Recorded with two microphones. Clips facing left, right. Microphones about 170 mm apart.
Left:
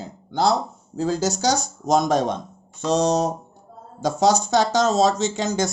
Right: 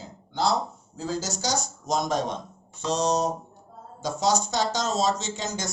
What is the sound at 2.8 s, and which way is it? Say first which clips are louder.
Music: left 5 dB; 50° left (ahead or behind).